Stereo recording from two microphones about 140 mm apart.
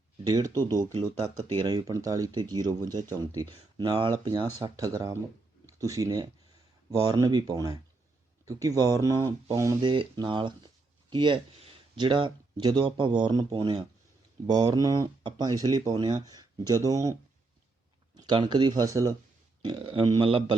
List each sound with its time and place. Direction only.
0.3 s speech: 30° right (ahead or behind)
1.5 s speech: 30° right (ahead or behind)
9.8 s speech: 35° right (ahead or behind)
18.2 s speech: 30° right (ahead or behind)
19.6 s speech: 35° right (ahead or behind)